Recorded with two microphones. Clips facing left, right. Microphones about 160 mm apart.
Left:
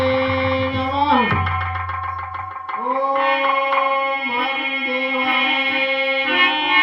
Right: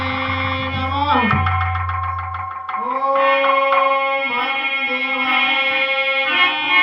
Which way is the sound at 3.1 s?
50° left (ahead or behind).